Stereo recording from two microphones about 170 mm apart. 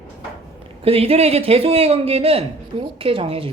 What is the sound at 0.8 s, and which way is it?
A man's voice, 35° right (ahead or behind).